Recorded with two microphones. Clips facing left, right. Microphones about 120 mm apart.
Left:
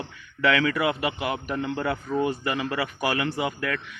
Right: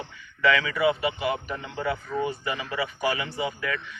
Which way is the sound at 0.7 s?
60° left (ahead or behind).